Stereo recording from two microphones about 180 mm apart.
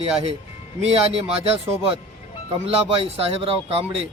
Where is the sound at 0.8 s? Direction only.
35° right (ahead or behind).